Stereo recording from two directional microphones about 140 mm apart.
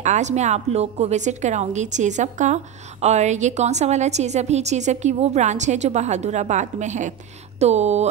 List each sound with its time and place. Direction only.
0.0 s a woman's voice: 55° right (ahead or behind)